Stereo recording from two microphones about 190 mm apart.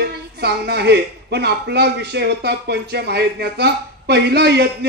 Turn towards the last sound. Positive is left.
turn(degrees=-60)  # may be behind; listen again after turning